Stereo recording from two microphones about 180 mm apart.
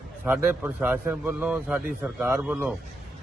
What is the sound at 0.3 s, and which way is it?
A man's voice, 10° right (ahead or behind).